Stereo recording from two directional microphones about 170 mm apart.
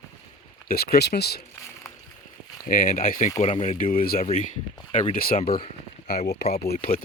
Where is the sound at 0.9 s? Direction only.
75° left (ahead or behind).